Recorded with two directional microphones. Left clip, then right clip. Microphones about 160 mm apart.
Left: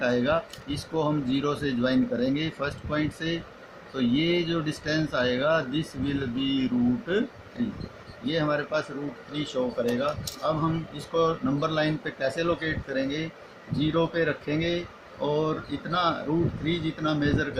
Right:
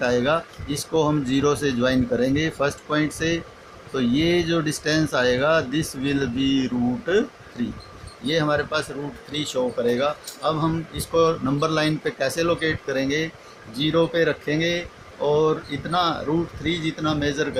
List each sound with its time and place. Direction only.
0.0 s speech: 40° right (ahead or behind)
8.3 s speech: 45° right (ahead or behind)